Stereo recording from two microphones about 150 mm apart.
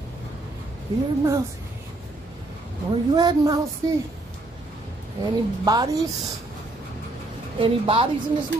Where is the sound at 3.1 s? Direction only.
25° right (ahead or behind).